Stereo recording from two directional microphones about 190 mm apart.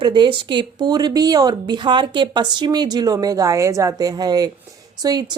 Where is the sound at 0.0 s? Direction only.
25° right (ahead or behind).